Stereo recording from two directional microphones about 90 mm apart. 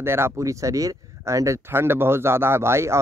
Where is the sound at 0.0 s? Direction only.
25° right (ahead or behind).